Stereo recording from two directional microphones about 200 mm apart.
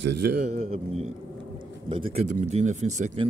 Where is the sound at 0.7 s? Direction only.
30° right (ahead or behind).